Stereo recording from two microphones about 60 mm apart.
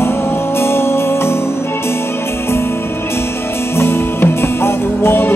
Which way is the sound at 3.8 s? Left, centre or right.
Left.